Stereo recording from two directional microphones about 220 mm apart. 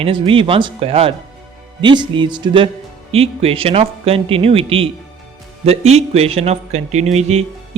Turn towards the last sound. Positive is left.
turn(degrees=-30)  # may be behind; listen again after turning